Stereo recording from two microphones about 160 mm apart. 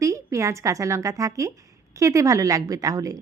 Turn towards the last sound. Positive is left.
turn(degrees=-20)  # may be behind; listen again after turning